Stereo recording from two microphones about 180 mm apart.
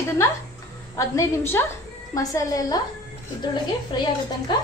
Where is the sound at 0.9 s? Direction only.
15° left (ahead or behind).